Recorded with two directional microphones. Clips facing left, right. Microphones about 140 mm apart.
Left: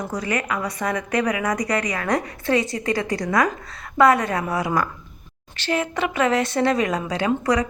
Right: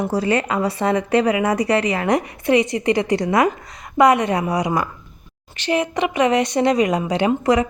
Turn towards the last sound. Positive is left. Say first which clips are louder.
# right 4 dB
turn(degrees=-25)  # may be behind; listen again after turning